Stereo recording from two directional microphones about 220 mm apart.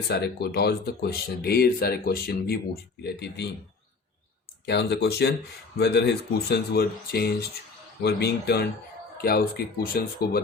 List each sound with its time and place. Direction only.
0.1 s speech: 45° left (ahead or behind)
4.6 s speech: 50° left (ahead or behind)